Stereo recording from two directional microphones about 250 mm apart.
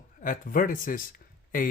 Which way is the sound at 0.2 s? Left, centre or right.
Left.